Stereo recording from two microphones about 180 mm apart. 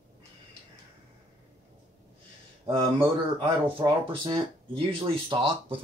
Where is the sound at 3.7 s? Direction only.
30° right (ahead or behind).